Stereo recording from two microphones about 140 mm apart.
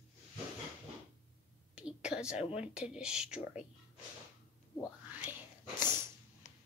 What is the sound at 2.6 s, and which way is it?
A child's voice, 5° right (ahead or behind).